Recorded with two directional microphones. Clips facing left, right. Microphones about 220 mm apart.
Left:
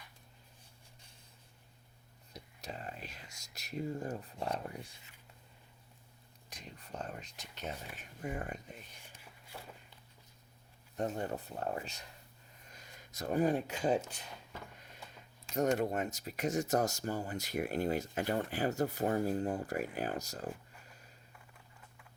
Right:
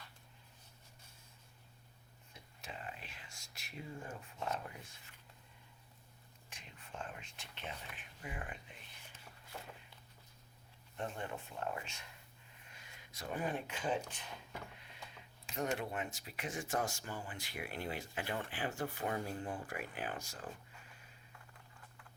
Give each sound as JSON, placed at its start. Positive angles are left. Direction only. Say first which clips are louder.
{"t": 2.3, "sound": "speech", "louder": "left 5 dB", "side_deg": 40}
{"t": 6.5, "sound": "speech", "louder": "left 5 dB", "side_deg": 40}
{"t": 10.9, "sound": "speech", "louder": "left 7 dB", "side_deg": 40}
{"t": 14.7, "sound": "a sound", "louder": "left 2 dB", "side_deg": 45}
{"t": 15.5, "sound": "speech", "louder": "left 7 dB", "side_deg": 45}